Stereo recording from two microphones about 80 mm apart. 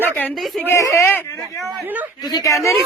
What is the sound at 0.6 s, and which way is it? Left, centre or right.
Speech, left.